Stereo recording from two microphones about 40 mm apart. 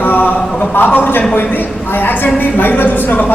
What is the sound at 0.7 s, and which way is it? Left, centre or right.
A woman's voice, left.